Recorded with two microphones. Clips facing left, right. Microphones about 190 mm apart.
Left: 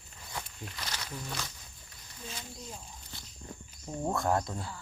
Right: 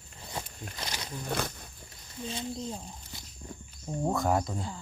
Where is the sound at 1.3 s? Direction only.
55° right (ahead or behind).